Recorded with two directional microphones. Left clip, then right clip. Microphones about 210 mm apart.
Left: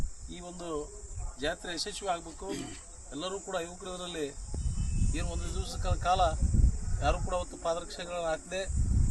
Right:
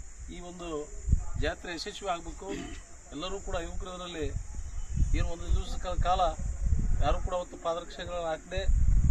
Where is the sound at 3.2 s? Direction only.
5° left (ahead or behind).